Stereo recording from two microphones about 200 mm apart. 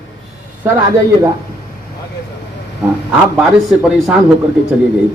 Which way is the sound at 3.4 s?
Centre (ahead or behind).